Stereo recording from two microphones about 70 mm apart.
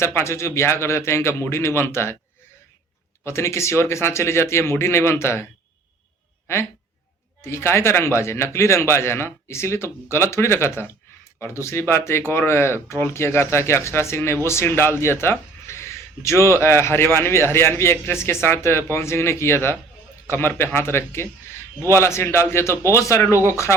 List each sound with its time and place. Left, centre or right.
0.0 s speech: left
3.2 s speech: left
7.4 s speech: left